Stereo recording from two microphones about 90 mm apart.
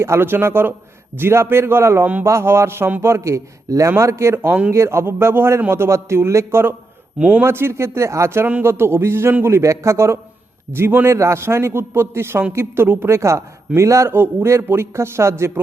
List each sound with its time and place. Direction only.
0.0 s a man's voice: 30° right (ahead or behind)
7.2 s a man's voice: 15° right (ahead or behind)
7.4 s a man's voice: 25° right (ahead or behind)